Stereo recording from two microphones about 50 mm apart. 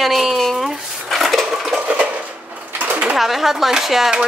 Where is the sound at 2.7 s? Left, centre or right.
Right.